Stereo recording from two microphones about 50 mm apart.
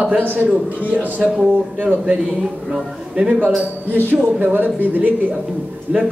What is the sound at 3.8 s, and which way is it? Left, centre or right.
Speech, right.